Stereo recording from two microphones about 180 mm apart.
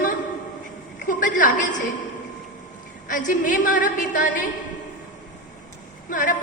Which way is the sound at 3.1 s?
45° left (ahead or behind).